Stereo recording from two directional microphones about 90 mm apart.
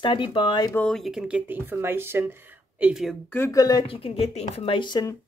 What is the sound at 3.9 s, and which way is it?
Speech, 90° left.